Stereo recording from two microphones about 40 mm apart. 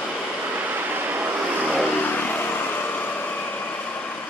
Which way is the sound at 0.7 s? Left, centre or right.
Right.